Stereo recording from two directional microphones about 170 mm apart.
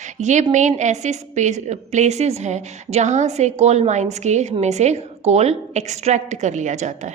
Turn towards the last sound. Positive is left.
turn(degrees=-45)  # may be behind; listen again after turning